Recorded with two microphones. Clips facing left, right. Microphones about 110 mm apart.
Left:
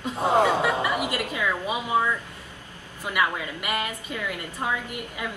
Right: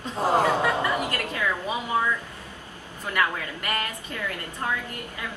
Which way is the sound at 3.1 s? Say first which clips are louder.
Left 1 dB; 15° left (ahead or behind).